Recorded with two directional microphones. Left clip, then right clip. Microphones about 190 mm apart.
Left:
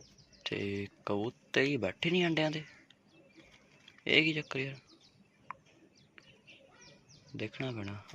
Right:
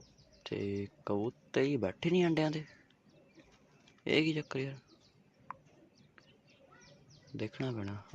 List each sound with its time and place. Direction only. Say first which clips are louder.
0.4 s speech: left 1 dB; 10° right (ahead or behind)
4.0 s speech: left 3 dB; 15° right (ahead or behind)
5.5 s bird: left 1 dB; 15° right (ahead or behind)
7.3 s speech: even; 15° right (ahead or behind)